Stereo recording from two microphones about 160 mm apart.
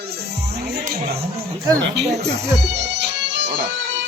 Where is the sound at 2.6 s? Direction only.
90° right.